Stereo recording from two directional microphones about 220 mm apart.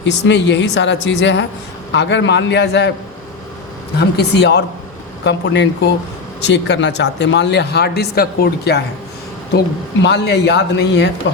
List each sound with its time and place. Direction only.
0.0 s speech: 55° left (ahead or behind)
4.2 s speech: 50° left (ahead or behind)
10.0 s speech: 50° left (ahead or behind)